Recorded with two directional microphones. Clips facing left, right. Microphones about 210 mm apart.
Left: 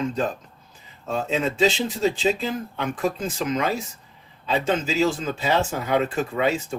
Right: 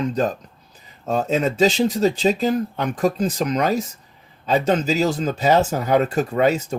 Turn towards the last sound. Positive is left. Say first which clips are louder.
# right 5 dB
turn(degrees=-40)  # may be behind; listen again after turning